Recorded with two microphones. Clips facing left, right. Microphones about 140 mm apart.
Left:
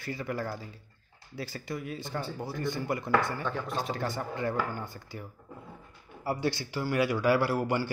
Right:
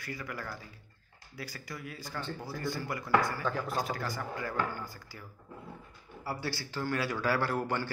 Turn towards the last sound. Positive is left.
turn(degrees=10)  # may be behind; listen again after turning